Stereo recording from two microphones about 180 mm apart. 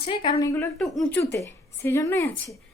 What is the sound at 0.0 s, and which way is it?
Speech, 30° left (ahead or behind).